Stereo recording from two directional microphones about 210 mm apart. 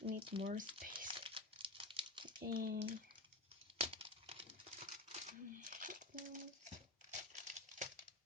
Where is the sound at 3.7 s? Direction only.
25° right (ahead or behind).